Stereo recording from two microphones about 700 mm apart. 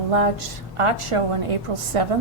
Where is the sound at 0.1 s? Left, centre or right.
Right.